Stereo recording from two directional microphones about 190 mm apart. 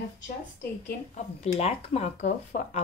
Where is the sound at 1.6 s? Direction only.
35° left (ahead or behind).